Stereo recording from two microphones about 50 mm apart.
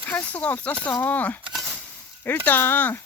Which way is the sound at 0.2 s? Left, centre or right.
Left.